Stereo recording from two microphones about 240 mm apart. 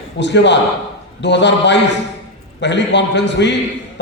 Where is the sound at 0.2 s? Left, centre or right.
Left.